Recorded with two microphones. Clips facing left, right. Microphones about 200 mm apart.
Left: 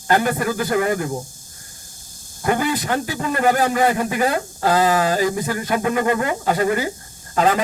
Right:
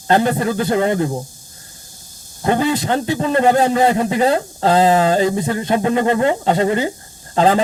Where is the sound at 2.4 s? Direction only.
25° right (ahead or behind).